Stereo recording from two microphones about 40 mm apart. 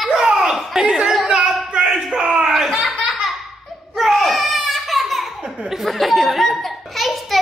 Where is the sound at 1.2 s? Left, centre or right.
Right.